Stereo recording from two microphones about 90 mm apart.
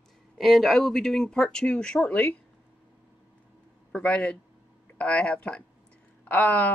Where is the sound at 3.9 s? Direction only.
15° left (ahead or behind).